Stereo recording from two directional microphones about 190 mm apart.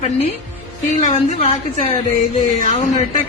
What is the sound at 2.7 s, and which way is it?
Speech, 35° left (ahead or behind).